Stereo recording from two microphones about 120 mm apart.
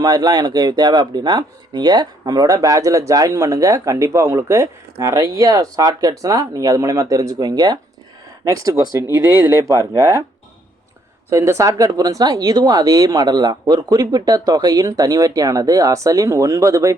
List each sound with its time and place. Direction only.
0.0 s speech: 35° right (ahead or behind)
9.2 s speech: 15° right (ahead or behind)
11.3 s speech: 25° right (ahead or behind)